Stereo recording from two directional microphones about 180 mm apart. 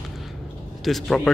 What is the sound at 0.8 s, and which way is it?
Speech, centre (ahead or behind).